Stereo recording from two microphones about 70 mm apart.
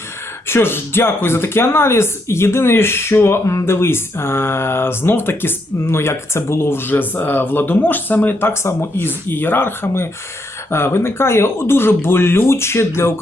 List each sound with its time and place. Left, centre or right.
0.4 s speech: left